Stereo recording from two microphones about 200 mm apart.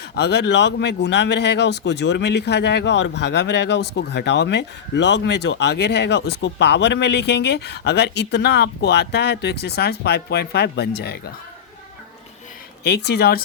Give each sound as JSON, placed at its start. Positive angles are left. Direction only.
{"t": 0.2, "sound": "a man's voice", "side_deg": 55}
{"t": 12.8, "sound": "speech", "side_deg": 55}